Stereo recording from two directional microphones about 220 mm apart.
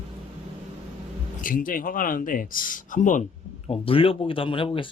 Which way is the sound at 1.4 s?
40° left (ahead or behind).